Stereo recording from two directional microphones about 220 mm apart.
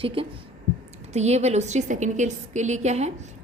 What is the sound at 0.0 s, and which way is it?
A woman's voice, 25° right (ahead or behind).